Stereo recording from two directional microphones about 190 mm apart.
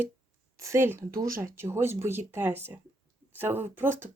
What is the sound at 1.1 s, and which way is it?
Speech, 50° right (ahead or behind).